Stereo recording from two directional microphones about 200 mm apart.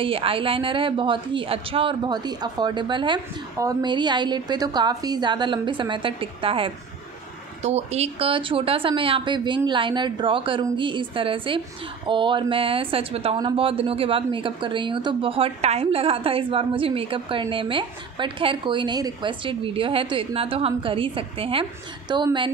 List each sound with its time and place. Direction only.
0.0 s speech: 25° right (ahead or behind)